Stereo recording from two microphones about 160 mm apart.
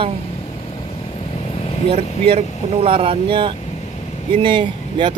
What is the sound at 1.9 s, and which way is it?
Speech, 40° right (ahead or behind).